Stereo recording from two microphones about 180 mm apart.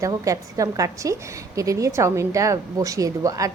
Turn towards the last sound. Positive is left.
turn(degrees=-20)  # may be behind; listen again after turning